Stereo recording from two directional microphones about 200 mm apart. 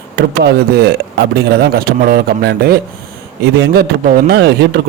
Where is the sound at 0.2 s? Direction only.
50° right (ahead or behind).